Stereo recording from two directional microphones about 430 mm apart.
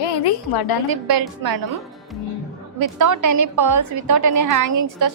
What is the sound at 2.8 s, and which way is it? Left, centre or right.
A woman's voice, right.